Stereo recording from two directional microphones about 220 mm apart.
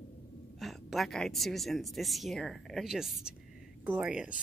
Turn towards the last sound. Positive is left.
turn(degrees=-5)  # may be behind; listen again after turning